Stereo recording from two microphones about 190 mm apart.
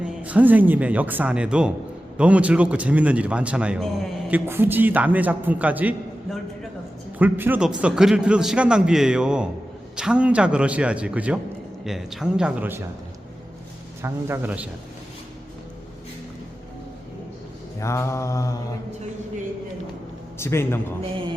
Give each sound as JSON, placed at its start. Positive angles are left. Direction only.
{"t": 0.0, "sound": "speech", "side_deg": -5}
{"t": 7.2, "sound": "a man's voice", "side_deg": -10}
{"t": 14.0, "sound": "speech", "side_deg": -10}
{"t": 17.7, "sound": "mantra", "side_deg": 15}
{"t": 20.4, "sound": "mantra", "side_deg": 15}
{"t": 21.0, "sound": "heart sounds", "side_deg": -25}